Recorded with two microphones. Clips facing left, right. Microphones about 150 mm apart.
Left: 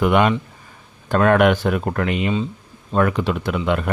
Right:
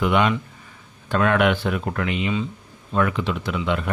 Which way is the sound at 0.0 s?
50° left (ahead or behind).